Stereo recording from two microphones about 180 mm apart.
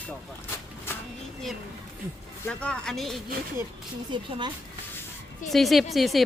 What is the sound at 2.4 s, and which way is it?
Speech, 5° left (ahead or behind).